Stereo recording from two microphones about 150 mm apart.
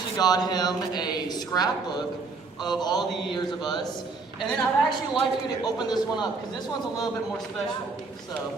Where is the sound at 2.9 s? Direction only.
Centre (ahead or behind).